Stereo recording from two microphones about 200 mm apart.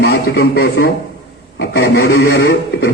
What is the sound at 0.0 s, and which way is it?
Speech, 50° left (ahead or behind).